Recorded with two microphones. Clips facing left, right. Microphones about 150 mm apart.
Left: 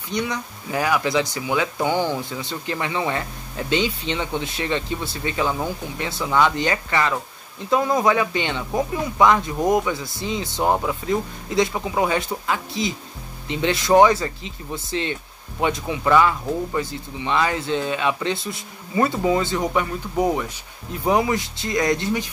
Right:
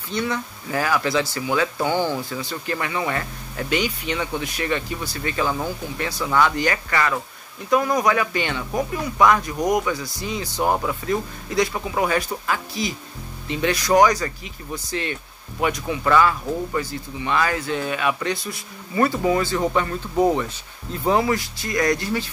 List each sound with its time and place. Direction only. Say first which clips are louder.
0.1 s speech: right 1 dB; 15° left (ahead or behind)